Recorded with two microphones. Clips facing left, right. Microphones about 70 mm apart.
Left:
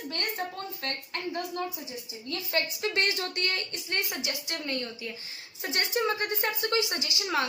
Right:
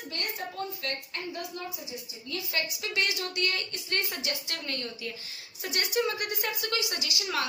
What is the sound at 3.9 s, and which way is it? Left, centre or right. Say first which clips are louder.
A woman's voice: even; centre.